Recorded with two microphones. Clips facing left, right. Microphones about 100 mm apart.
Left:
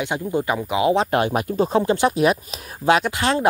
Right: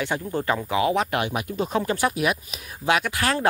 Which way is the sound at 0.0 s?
15° left (ahead or behind).